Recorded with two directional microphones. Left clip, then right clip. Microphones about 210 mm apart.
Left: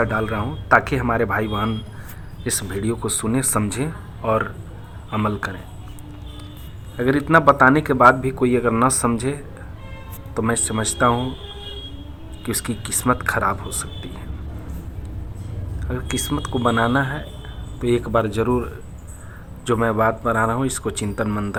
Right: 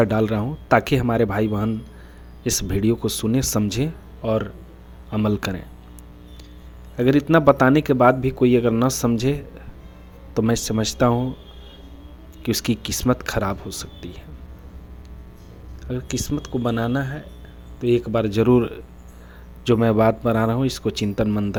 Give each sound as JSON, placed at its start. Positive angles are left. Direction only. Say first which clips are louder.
{"t": 0.0, "sound": "a man's voice", "louder": "right 1 dB", "side_deg": -50}
{"t": 6.9, "sound": "a man's voice", "louder": "left 1 dB", "side_deg": -45}
{"t": 12.4, "sound": "a man's voice", "louder": "right 3 dB", "side_deg": -50}
{"t": 15.9, "sound": "a man's voice", "louder": "left 2 dB", "side_deg": -40}